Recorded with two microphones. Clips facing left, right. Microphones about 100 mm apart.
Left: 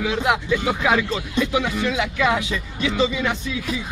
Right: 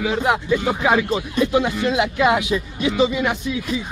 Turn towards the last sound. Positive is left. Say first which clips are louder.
# right 3 dB
turn(degrees=-15)  # may be behind; listen again after turning